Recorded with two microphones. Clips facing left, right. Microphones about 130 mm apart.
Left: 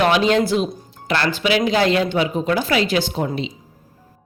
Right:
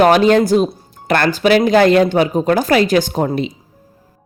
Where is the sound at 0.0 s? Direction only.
45° right (ahead or behind).